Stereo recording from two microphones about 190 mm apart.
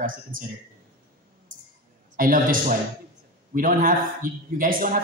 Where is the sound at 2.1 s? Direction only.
45° right (ahead or behind).